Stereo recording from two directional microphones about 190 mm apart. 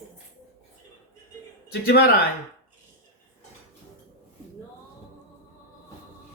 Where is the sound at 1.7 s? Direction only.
55° left (ahead or behind).